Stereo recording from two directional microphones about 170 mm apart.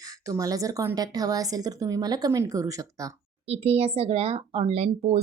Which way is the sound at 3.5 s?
35° right (ahead or behind).